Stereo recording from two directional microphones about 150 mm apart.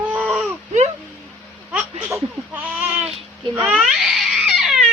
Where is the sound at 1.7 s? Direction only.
5° right (ahead or behind).